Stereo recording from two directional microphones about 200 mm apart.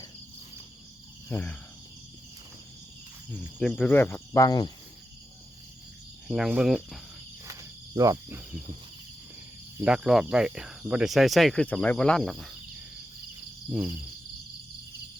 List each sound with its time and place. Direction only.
1.3 s cricket: 10° left (ahead or behind)
3.6 s cricket: 5° left (ahead or behind); by 4.7 s 20° left (ahead or behind)
6.2 s speech: centre (ahead or behind)
7.9 s cricket: 15° right (ahead or behind)
9.7 s speech: 5° right (ahead or behind)
13.7 s cricket: 10° right (ahead or behind)